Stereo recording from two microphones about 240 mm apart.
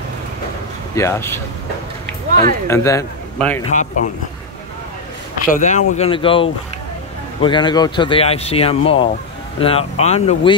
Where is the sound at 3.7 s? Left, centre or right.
Left.